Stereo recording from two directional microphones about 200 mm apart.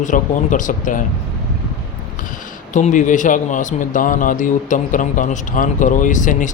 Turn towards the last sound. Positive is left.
turn(degrees=40)  # may be behind; listen again after turning